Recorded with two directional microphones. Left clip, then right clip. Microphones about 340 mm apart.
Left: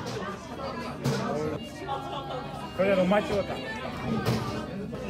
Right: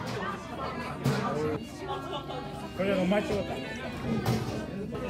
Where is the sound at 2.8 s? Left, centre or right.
Centre.